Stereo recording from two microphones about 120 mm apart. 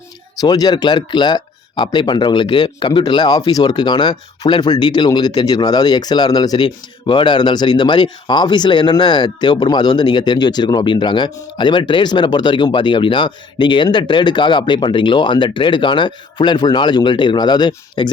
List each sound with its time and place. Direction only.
0.4 s speech: 35° left (ahead or behind)